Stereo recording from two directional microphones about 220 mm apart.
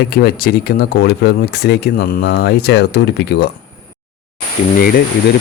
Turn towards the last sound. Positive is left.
turn(degrees=40)  # may be behind; listen again after turning